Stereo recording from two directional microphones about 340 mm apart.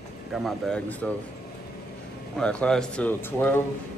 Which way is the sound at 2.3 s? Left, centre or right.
Centre.